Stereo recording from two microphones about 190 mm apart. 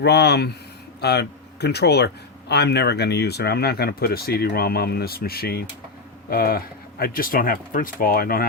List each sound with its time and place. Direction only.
0.0 s speech: 60° left (ahead or behind)